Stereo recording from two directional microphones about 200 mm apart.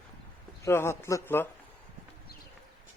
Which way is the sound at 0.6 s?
15° left (ahead or behind).